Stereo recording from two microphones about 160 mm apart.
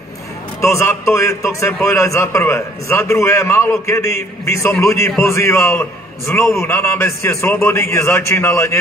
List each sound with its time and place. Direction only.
0.6 s a man's voice: 15° left (ahead or behind)